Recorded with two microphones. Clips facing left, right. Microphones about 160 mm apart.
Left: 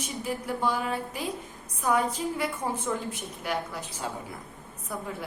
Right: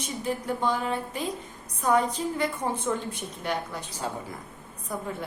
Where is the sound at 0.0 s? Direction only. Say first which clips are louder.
Right 2 dB; 5° left (ahead or behind).